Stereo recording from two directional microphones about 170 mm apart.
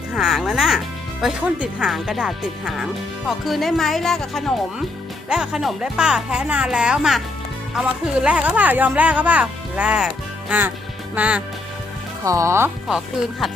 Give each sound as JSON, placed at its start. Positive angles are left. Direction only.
{"t": 0.2, "sound": "speech", "side_deg": 0}
{"t": 11.1, "sound": "speech", "side_deg": -10}
{"t": 12.2, "sound": "speech", "side_deg": -20}